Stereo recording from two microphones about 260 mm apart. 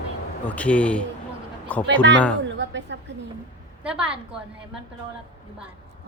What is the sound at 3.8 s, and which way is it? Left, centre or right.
Speech, centre.